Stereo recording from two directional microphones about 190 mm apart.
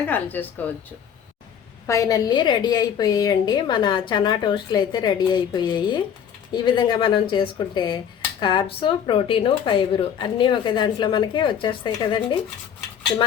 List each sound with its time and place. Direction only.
0.0 s speech: 10° left (ahead or behind)
1.9 s a woman's voice: 20° left (ahead or behind)